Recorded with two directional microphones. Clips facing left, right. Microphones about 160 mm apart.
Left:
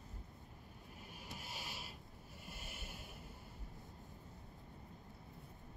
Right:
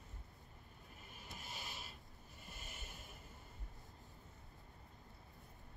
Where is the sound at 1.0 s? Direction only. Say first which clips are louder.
Left 2 dB; 10° left (ahead or behind).